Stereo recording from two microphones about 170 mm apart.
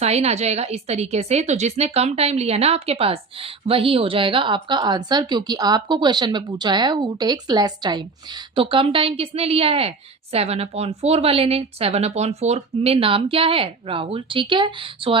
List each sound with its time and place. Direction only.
0.0 s a woman's voice: 40° right (ahead or behind)